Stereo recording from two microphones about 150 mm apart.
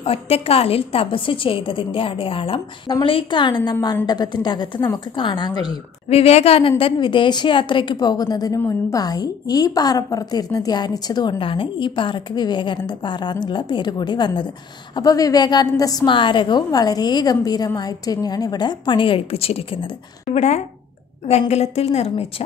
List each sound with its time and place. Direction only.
0.0 s a woman's voice: 40° left (ahead or behind)
6.0 s a woman's voice: 40° left (ahead or behind)